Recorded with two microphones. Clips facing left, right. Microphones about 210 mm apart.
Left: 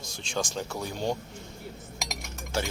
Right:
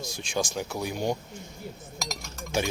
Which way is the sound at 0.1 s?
10° right (ahead or behind).